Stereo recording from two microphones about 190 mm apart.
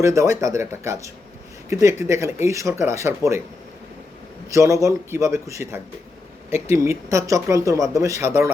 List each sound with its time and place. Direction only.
0.0 s speech: 15° right (ahead or behind)
4.5 s speech: 15° right (ahead or behind)